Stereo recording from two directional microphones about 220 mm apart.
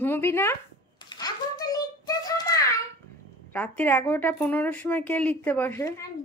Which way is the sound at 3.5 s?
10° left (ahead or behind).